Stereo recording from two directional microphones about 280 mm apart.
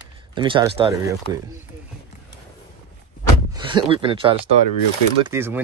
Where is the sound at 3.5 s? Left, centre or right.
Centre.